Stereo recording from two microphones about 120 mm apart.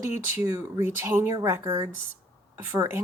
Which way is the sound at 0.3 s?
20° right (ahead or behind).